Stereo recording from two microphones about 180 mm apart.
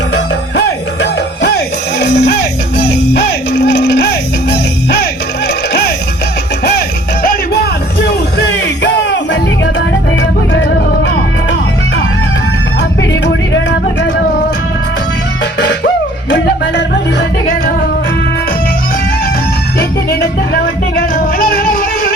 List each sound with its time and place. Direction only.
1.0 s music: 70° left (ahead or behind)
3.5 s a sound: 60° left (ahead or behind)
7.2 s music: 55° left (ahead or behind); by 11.1 s 75° left (ahead or behind)
13.0 s music: 80° left
16.3 s music: 70° left (ahead or behind)
20.1 s music: 60° left (ahead or behind)